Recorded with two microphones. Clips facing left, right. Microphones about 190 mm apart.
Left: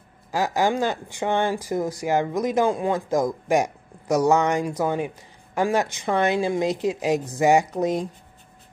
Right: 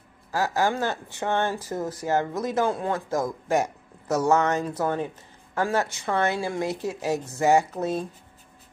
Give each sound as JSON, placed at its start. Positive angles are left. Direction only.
{"t": 0.3, "sound": "speech", "side_deg": 15}